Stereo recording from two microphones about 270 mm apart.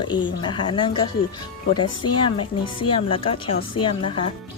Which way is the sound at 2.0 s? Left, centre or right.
Left.